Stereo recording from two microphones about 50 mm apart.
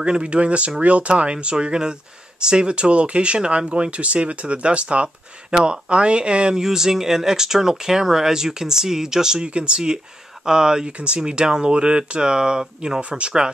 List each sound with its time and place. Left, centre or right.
0.0 s speech: centre